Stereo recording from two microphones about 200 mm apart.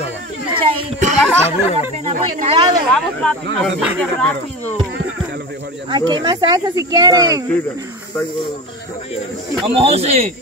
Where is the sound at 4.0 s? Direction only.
5° left (ahead or behind).